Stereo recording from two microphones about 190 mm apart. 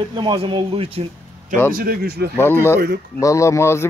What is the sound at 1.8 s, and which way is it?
Speech, 55° right (ahead or behind).